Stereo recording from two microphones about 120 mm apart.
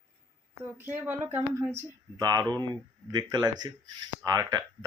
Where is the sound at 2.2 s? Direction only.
35° right (ahead or behind).